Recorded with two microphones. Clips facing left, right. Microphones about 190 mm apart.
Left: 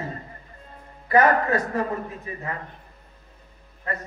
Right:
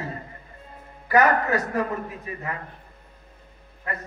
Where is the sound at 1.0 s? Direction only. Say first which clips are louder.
Left 1 dB; 25° left (ahead or behind).